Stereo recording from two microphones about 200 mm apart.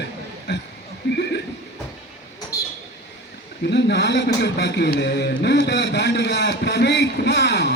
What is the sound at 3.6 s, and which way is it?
A man's voice, 60° left (ahead or behind).